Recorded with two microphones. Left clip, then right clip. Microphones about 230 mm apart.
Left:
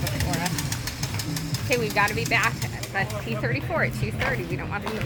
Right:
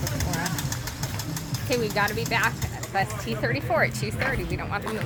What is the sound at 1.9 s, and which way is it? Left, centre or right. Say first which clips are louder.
Speech: left 4 dB; right.